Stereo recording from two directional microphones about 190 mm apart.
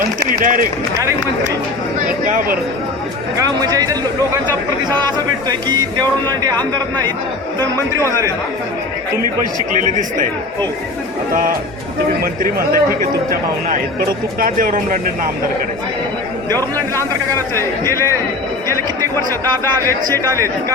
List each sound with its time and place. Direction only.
0.2 s speech: 45° right (ahead or behind)
2.2 s speech: 45° right (ahead or behind)
3.3 s speech: 20° right (ahead or behind)
5.0 s speech: 20° right (ahead or behind)
12.2 s speech: 50° right (ahead or behind)
16.5 s speech: 10° left (ahead or behind)
19.3 s speech: 10° left (ahead or behind)
20.2 s speech: 15° right (ahead or behind)